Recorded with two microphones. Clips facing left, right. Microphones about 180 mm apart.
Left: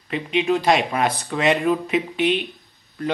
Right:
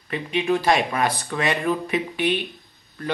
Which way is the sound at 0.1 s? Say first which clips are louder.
Left 2 dB; 20° left (ahead or behind).